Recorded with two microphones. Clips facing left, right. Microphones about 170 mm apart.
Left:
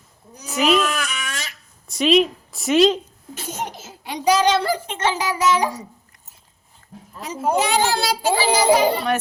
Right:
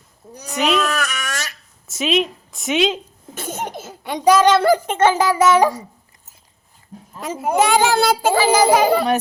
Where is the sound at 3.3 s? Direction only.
50° right (ahead or behind).